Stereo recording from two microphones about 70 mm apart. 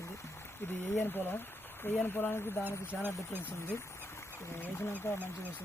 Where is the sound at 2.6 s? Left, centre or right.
Right.